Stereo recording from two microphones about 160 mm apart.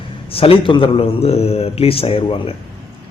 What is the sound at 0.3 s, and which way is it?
A man's voice, 35° left (ahead or behind).